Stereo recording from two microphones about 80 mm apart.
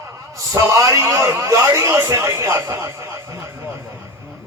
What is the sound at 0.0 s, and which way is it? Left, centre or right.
A man's voice, right.